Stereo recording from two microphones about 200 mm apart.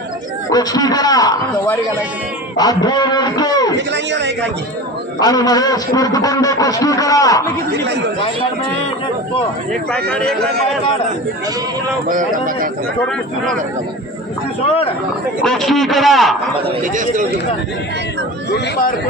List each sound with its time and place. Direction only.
0.5 s a man's voice: 20° left (ahead or behind)
3.8 s a man's voice: 60° right (ahead or behind)
5.2 s a man's voice: 20° left (ahead or behind)
9.9 s a man's voice: 5° left (ahead or behind)
12.0 s speech: 40° right (ahead or behind)
15.4 s a man's voice: centre (ahead or behind)
16.8 s speech: 40° right (ahead or behind)